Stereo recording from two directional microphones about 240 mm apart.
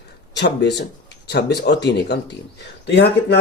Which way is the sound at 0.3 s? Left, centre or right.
Left.